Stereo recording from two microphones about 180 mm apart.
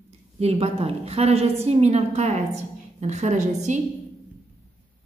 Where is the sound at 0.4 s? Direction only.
35° right (ahead or behind).